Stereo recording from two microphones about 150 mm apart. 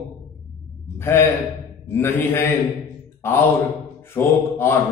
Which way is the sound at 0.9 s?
15° left (ahead or behind).